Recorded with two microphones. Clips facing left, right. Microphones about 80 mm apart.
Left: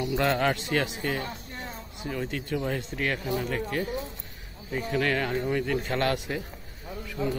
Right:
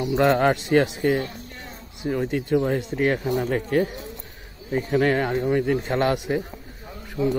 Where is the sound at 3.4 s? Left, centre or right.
Right.